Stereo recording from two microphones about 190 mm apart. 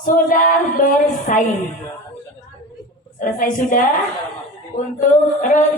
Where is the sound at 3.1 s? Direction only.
45° left (ahead or behind).